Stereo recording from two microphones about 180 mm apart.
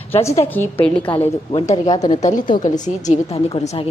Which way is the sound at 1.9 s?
20° left (ahead or behind).